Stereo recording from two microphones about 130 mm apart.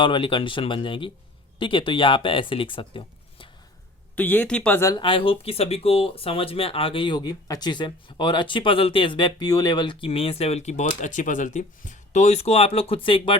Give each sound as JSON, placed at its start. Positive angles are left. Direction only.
{"t": 0.0, "sound": "speech", "side_deg": 40}
{"t": 4.1, "sound": "speech", "side_deg": 15}
{"t": 4.9, "sound": "speech", "side_deg": 45}